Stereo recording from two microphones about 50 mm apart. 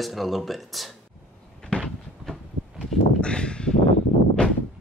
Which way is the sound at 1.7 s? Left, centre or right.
Left.